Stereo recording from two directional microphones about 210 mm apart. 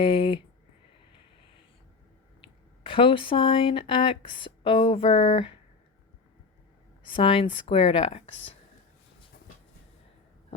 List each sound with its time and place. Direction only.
0.0 s speech: 25° left (ahead or behind)
2.8 s speech: 25° left (ahead or behind)
7.0 s speech: 25° left (ahead or behind)